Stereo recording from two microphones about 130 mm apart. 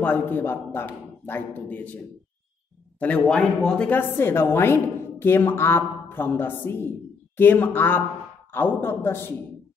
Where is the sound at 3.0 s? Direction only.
5° left (ahead or behind).